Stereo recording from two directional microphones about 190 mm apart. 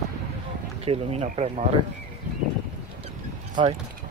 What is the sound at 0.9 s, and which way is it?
Speech, 35° right (ahead or behind).